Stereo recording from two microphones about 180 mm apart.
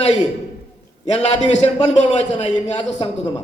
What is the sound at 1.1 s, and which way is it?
A man's voice, 35° left (ahead or behind).